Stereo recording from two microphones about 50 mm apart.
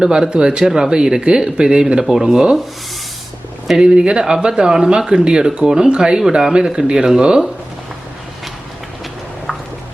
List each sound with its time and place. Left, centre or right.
0.0 s speech: centre
3.8 s speech: centre